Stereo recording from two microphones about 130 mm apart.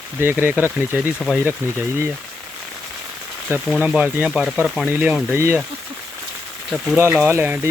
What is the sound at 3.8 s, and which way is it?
Speech, 10° right (ahead or behind).